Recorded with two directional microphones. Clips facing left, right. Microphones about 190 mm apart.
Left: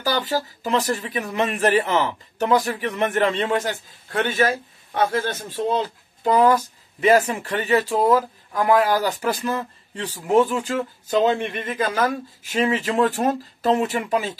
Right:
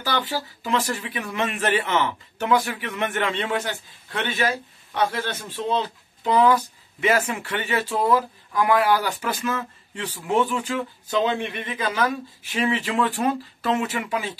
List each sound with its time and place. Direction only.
0.0 s speech: 40° left (ahead or behind)
5.6 s speech: 40° left (ahead or behind)